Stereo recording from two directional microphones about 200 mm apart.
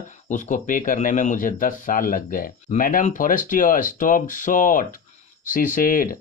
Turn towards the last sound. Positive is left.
turn(degrees=45)  # may be behind; listen again after turning